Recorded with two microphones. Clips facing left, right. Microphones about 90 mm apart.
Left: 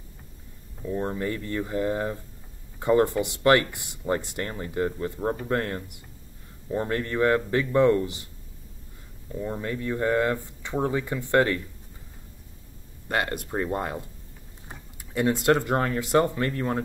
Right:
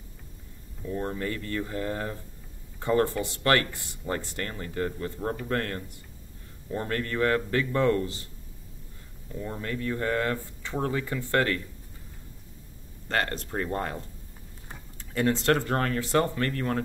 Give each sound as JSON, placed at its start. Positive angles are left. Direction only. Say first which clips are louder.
{"t": 0.8, "sound": "speech", "louder": "left 3 dB", "side_deg": 20}
{"t": 9.3, "sound": "speech", "louder": "left 3 dB", "side_deg": 20}
{"t": 13.1, "sound": "speech", "louder": "left 2 dB", "side_deg": 15}